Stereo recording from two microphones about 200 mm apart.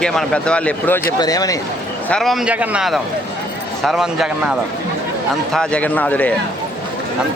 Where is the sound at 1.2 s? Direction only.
20° left (ahead or behind).